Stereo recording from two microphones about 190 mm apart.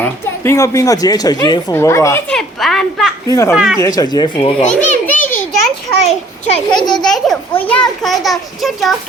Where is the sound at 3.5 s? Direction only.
5° right (ahead or behind).